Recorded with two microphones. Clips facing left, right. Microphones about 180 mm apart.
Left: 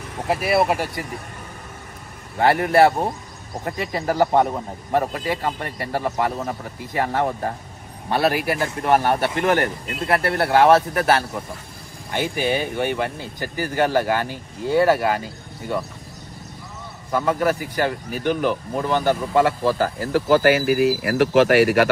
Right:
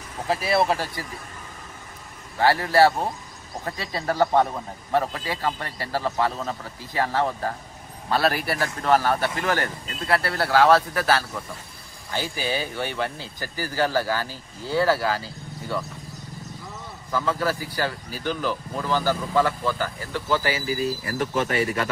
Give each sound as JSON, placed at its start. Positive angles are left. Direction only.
{"t": 0.3, "sound": "speech", "side_deg": 20}
{"t": 2.3, "sound": "speech", "side_deg": 20}
{"t": 17.1, "sound": "speech", "side_deg": 20}
{"t": 20.3, "sound": "speech", "side_deg": 60}